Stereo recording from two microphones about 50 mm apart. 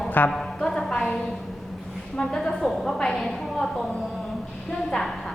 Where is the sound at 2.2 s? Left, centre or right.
Centre.